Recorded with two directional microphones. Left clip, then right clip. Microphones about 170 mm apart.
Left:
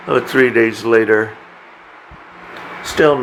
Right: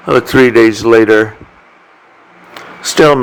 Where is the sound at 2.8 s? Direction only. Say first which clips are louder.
Right 5 dB; 55° right (ahead or behind).